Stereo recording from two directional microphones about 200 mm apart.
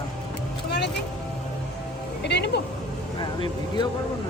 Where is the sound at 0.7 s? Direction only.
55° left (ahead or behind).